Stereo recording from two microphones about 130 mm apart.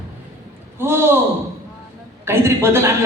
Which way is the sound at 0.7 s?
20° right (ahead or behind).